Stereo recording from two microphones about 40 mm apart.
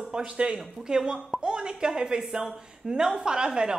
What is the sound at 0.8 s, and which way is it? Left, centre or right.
A woman's voice, centre.